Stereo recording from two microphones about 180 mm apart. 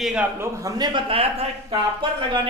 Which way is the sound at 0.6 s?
25° right (ahead or behind).